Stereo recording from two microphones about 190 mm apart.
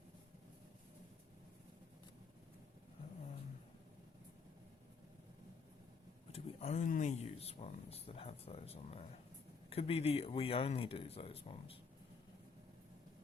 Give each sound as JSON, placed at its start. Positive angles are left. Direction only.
{"t": 6.3, "sound": "speech", "side_deg": 35}